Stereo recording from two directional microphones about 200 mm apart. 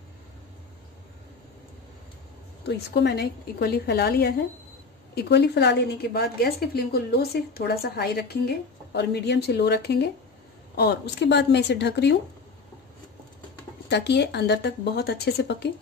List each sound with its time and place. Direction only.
2.9 s a woman's voice: 55° left (ahead or behind)
13.8 s speech: 55° left (ahead or behind)